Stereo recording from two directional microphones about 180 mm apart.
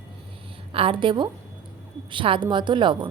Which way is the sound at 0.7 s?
30° right (ahead or behind).